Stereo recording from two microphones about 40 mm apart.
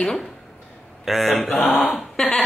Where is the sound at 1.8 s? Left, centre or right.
Centre.